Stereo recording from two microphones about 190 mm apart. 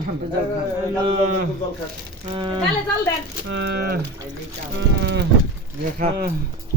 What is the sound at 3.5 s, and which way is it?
Speech, 60° right (ahead or behind).